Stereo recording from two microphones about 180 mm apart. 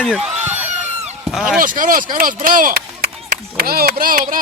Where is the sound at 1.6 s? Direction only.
50° right (ahead or behind).